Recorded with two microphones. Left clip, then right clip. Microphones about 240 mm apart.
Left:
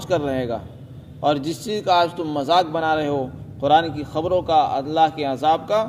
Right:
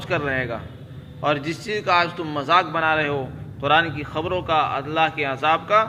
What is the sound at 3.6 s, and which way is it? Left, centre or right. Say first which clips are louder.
A man's voice: left 2 dB; left.